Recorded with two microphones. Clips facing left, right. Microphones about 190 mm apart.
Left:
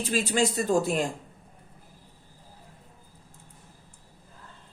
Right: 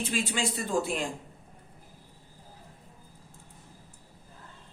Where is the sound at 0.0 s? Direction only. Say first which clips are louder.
Left 5 dB; 40° left (ahead or behind).